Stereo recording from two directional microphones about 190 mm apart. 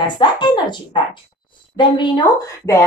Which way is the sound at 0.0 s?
25° left (ahead or behind).